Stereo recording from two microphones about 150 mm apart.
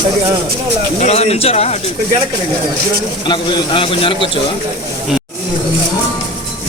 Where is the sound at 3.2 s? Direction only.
30° left (ahead or behind).